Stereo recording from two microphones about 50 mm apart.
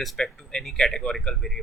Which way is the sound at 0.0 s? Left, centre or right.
Centre.